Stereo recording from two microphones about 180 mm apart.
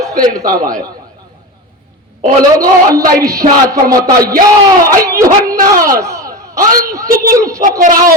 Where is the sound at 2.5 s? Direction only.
20° right (ahead or behind).